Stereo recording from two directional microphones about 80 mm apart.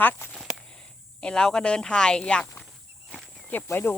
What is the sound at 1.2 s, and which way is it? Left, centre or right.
Speech, centre.